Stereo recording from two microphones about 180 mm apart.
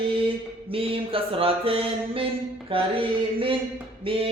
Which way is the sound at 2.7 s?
30° right (ahead or behind).